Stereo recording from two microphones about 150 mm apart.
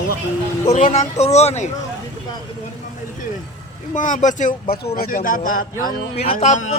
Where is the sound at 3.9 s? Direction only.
55° left (ahead or behind).